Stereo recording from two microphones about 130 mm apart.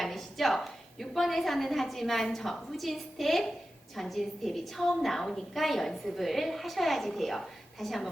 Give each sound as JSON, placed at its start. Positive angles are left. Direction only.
{"t": 0.0, "sound": "a woman's voice", "side_deg": 0}